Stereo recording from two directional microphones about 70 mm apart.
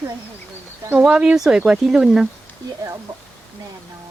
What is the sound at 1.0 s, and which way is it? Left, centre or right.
Speech, centre.